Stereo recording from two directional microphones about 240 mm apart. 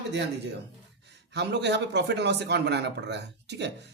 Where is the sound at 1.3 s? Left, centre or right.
Right.